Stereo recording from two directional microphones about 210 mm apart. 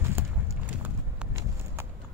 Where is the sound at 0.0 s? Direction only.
10° right (ahead or behind).